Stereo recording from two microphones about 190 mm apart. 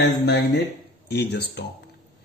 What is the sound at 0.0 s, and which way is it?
Speech, 65° left (ahead or behind).